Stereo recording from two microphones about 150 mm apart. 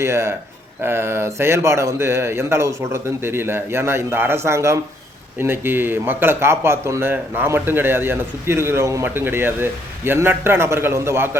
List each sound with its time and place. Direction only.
0.0 s speech: 15° right (ahead or behind)